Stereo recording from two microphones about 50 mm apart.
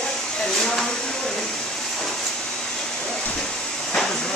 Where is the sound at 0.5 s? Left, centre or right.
Centre.